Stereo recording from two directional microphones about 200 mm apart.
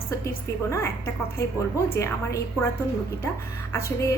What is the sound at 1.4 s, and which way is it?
A woman's voice, 15° left (ahead or behind).